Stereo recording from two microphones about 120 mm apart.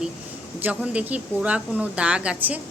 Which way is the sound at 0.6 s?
10° right (ahead or behind).